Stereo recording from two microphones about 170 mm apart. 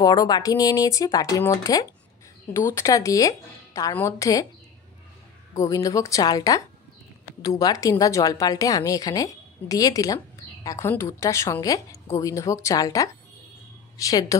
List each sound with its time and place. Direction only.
0.0 s a woman's voice: 20° left (ahead or behind)
5.5 s a woman's voice: 20° left (ahead or behind)